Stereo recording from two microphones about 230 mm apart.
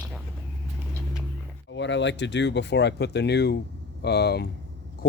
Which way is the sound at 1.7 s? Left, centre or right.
Left.